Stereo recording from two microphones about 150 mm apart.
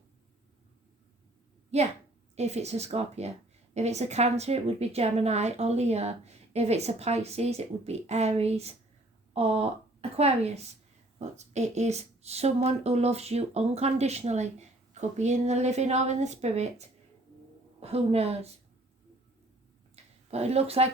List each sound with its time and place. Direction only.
1.7 s a woman's voice: 45° right (ahead or behind)
20.3 s a woman's voice: 45° right (ahead or behind)